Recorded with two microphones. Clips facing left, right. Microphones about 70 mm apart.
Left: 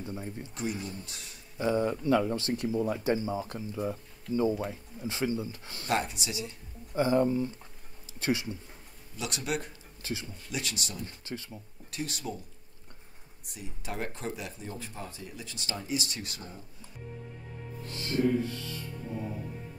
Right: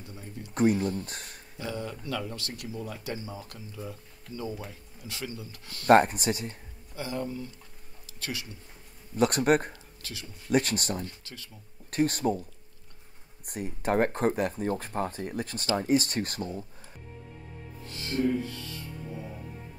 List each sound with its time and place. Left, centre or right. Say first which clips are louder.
0.0 s speech: left 5 dB; left
0.6 s speech: right 11 dB; right
1.6 s speech: left 8 dB; left
5.9 s speech: right 11 dB; right
7.0 s speech: left 9 dB; left
9.1 s speech: right 11 dB; right
10.0 s speech: left 7 dB; left
10.5 s speech: right 11 dB; right
11.2 s speech: left 7 dB; left
11.9 s speech: right 10 dB; right
13.5 s speech: right 11 dB; right